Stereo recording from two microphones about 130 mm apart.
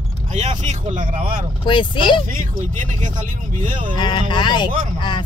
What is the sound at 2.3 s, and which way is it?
Speech, 80° right.